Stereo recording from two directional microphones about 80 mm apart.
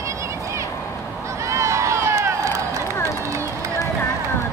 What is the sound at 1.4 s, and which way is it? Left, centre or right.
Crowd, right.